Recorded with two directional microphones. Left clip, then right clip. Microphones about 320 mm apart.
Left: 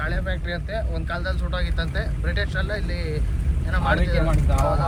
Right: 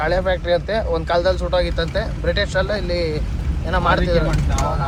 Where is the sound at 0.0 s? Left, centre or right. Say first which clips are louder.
Right 10 dB; centre.